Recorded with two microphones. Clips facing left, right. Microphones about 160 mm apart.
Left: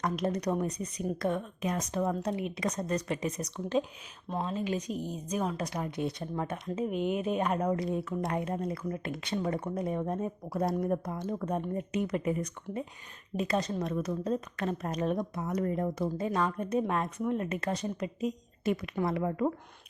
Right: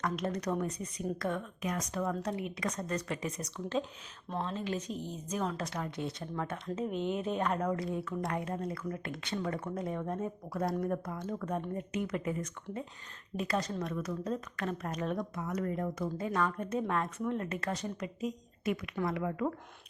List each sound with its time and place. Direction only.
0.0 s speech: 15° left (ahead or behind)
15.4 s speech: 30° left (ahead or behind)